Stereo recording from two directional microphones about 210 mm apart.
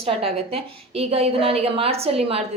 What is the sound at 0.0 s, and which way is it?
A woman's voice, 25° right (ahead or behind).